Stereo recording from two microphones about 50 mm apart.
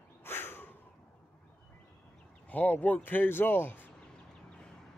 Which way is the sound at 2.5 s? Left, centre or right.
Left.